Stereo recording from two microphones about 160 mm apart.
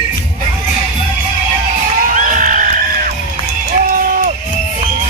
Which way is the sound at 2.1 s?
55° right (ahead or behind).